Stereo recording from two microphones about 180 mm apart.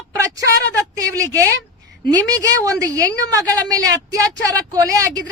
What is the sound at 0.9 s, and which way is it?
Speech, 20° right (ahead or behind).